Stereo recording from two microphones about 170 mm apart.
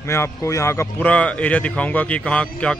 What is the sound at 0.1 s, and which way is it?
Speech, 15° left (ahead or behind).